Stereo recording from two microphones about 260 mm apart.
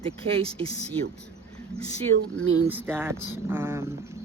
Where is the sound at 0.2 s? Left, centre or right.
Right.